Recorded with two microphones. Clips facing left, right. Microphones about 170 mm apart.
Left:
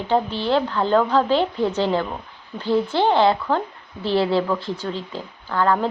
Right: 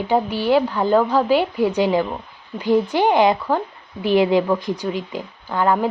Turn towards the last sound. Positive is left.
turn(degrees=-15)  # may be behind; listen again after turning